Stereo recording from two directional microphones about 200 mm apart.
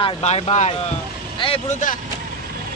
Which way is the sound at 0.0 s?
30° left (ahead or behind).